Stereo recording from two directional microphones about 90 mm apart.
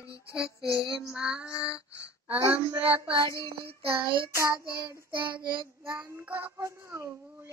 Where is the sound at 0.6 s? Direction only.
45° left (ahead or behind).